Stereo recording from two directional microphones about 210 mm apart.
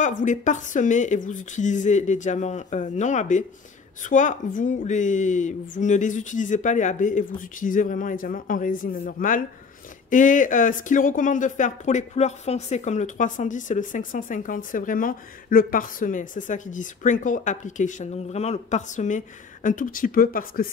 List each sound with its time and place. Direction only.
0.2 s speech: 35° left (ahead or behind)